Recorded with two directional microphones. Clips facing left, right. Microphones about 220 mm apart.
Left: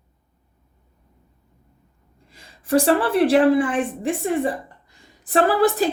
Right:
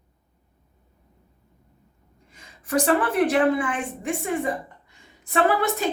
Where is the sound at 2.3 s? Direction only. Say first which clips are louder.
Left 5 dB; 30° left (ahead or behind).